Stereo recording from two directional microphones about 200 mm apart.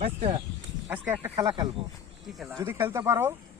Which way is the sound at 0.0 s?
30° right (ahead or behind).